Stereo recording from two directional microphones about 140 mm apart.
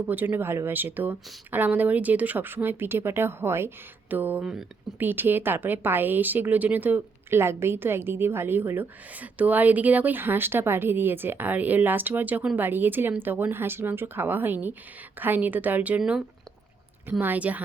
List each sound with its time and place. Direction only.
0.1 s speech: 15° right (ahead or behind)